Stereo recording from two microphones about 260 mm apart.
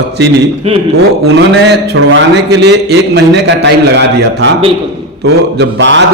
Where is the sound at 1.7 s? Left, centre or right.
Right.